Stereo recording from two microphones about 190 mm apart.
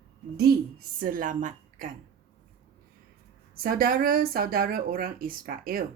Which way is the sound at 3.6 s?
50° right (ahead or behind).